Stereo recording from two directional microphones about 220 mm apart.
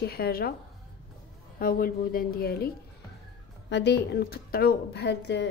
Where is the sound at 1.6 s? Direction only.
40° left (ahead or behind).